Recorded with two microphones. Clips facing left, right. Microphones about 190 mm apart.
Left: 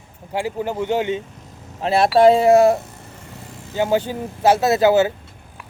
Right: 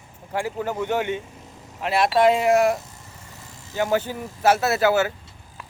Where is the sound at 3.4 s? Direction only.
55° left (ahead or behind).